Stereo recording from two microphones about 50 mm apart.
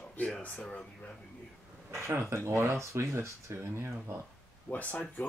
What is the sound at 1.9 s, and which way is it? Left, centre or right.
Speech, right.